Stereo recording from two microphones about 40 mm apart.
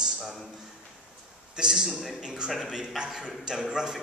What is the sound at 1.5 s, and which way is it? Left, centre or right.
Speech, centre.